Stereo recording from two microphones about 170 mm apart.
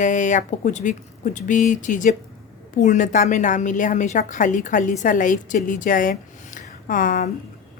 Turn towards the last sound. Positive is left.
turn(degrees=50)  # may be behind; listen again after turning